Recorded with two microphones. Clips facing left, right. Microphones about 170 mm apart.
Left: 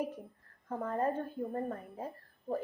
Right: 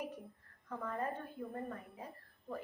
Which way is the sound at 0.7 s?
40° left (ahead or behind).